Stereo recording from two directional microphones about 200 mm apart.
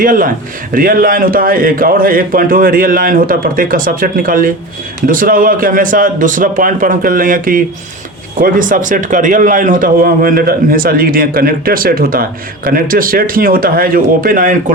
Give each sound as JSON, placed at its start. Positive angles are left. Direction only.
{"t": 0.0, "sound": "a man's voice", "side_deg": -45}